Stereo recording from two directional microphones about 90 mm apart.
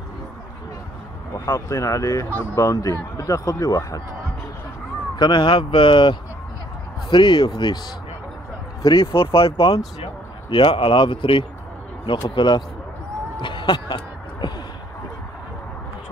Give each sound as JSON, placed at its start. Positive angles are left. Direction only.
{"t": 1.4, "sound": "speech", "side_deg": 35}
{"t": 5.1, "sound": "speech", "side_deg": 55}
{"t": 8.9, "sound": "speech", "side_deg": 70}
{"t": 10.5, "sound": "speech", "side_deg": 60}
{"t": 12.4, "sound": "speech", "side_deg": 55}
{"t": 13.4, "sound": "a sound", "side_deg": 60}